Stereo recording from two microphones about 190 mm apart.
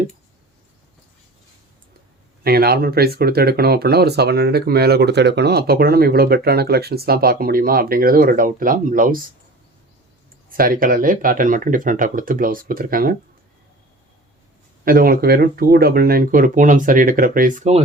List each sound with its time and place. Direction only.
2.4 s speech: 55° right (ahead or behind)
10.6 s speech: 50° right (ahead or behind)
14.8 s speech: 50° right (ahead or behind)